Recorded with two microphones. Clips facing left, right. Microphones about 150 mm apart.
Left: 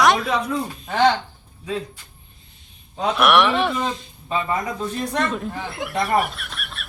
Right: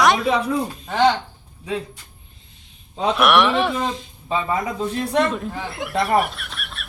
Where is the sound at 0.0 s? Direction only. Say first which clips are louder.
Even; centre (ahead or behind).